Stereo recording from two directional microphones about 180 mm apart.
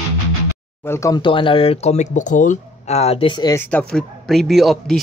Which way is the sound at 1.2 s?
30° left (ahead or behind).